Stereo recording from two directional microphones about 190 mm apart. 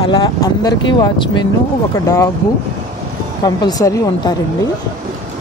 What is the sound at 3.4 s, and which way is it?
Speech, 20° left (ahead or behind).